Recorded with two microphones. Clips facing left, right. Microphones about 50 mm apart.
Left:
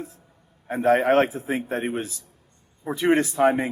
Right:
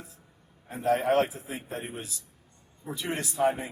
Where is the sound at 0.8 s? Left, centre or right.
Left.